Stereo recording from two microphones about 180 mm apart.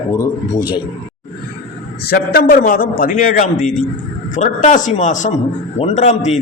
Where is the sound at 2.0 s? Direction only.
60° left (ahead or behind).